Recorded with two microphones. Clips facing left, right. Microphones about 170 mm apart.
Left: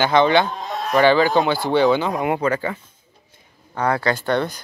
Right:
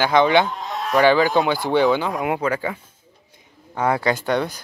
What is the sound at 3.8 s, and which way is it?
Speech, 20° right (ahead or behind).